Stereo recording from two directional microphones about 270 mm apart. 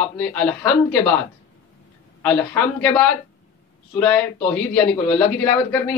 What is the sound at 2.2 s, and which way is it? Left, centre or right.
A man's voice, centre.